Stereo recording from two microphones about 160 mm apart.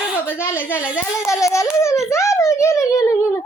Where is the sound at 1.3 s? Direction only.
20° left (ahead or behind).